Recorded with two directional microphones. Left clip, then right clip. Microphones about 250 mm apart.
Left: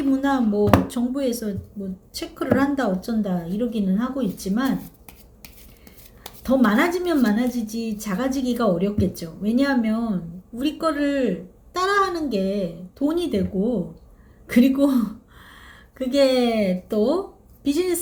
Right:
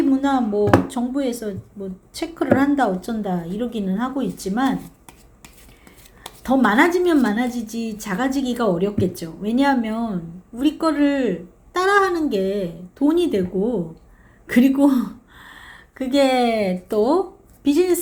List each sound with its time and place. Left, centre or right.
0.1 s a woman's voice: centre
6.2 s a woman's voice: centre